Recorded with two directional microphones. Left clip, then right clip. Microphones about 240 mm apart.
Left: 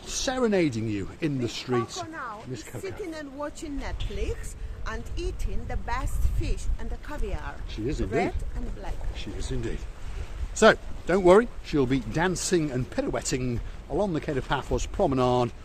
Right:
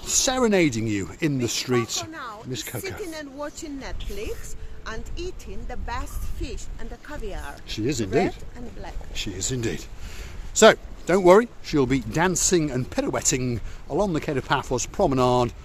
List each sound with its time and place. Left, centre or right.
0.0 s speech: right
3.4 s speech: centre
7.7 s speech: right
9.1 s speech: right
10.5 s speech: right